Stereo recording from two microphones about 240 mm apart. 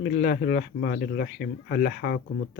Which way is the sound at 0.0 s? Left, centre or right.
Left.